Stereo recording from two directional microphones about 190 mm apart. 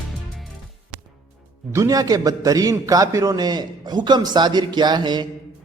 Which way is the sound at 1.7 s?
15° right (ahead or behind).